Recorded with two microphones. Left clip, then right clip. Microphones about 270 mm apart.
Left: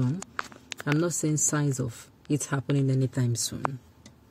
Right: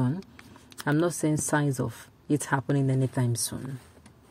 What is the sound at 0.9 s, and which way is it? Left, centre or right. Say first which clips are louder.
Speech: right 2 dB; centre.